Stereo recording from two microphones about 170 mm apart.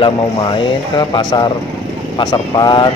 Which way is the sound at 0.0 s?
30° left (ahead or behind).